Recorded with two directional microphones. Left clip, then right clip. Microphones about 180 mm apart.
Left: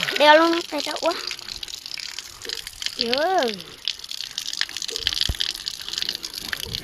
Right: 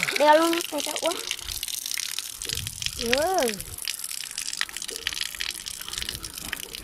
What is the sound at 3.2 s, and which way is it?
Speech, centre (ahead or behind).